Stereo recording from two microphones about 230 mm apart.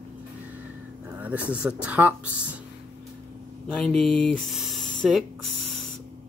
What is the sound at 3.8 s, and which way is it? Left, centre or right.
Speech, centre.